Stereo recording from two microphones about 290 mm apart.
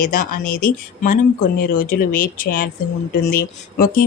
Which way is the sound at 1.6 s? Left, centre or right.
Left.